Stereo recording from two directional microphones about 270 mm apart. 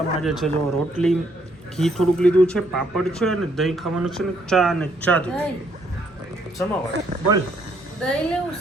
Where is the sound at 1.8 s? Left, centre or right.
Centre.